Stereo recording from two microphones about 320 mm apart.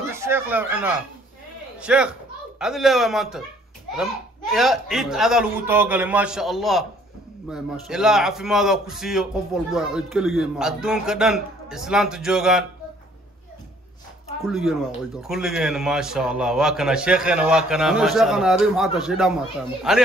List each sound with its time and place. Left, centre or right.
0.1 s a man's voice: centre
14.4 s a man's voice: centre